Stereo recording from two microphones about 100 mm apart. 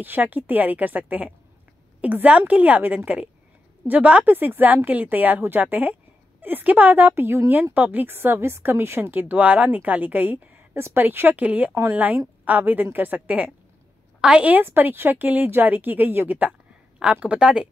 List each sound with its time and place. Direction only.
0.0 s a woman's voice: 20° right (ahead or behind)